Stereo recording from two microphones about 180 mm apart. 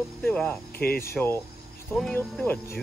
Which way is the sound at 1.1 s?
15° left (ahead or behind).